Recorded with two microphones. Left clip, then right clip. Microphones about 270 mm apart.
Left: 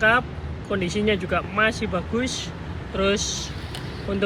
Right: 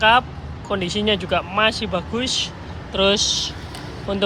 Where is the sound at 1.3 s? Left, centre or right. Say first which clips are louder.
Right 4 dB; right.